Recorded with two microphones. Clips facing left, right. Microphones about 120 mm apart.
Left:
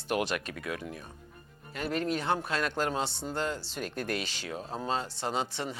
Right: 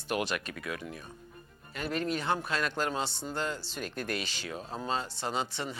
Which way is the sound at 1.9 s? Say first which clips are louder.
Left 1 dB; 55° left (ahead or behind).